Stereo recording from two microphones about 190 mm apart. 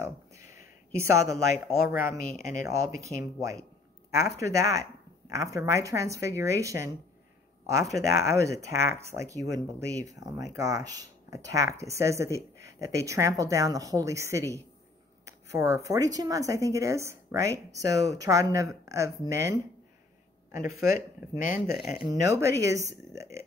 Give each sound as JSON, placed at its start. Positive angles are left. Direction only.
{"t": 0.9, "sound": "speech", "side_deg": -15}
{"t": 21.5, "sound": "speech", "side_deg": 0}
{"t": 22.1, "sound": "speech", "side_deg": -15}